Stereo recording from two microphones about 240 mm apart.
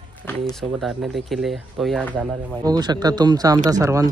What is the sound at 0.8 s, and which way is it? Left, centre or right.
Speech, centre.